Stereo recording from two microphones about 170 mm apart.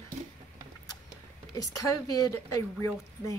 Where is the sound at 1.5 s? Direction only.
20° left (ahead or behind).